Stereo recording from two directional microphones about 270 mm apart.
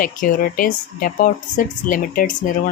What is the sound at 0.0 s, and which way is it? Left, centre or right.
Speech, left.